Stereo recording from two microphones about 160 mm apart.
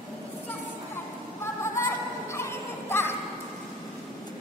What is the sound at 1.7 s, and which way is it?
Music, 15° left (ahead or behind).